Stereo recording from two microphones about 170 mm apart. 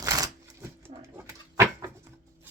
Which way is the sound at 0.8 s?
15° right (ahead or behind).